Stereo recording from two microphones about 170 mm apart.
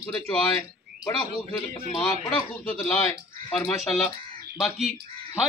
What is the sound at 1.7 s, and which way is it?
Speech, 20° left (ahead or behind).